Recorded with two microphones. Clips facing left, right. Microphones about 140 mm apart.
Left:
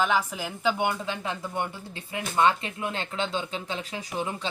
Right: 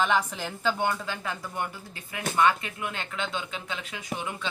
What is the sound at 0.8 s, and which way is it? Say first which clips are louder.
Speech: left 1 dB; 20° left (ahead or behind).